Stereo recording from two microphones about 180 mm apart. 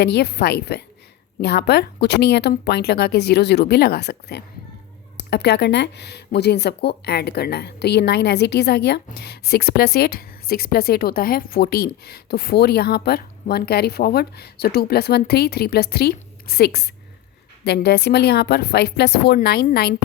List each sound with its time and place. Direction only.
0.0 s speech: 65° left (ahead or behind)